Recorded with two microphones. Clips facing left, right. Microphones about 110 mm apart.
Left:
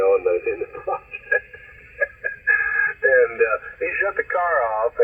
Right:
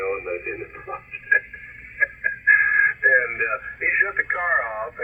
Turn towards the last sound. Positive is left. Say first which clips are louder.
# left 7 dB
turn(degrees=35)  # may be behind; listen again after turning